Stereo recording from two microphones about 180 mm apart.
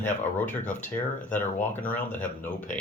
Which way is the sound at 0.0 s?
10° left (ahead or behind).